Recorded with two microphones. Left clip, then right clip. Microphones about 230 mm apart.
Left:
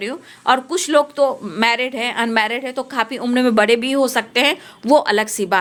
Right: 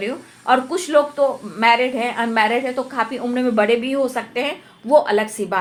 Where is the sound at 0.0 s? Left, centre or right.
Left.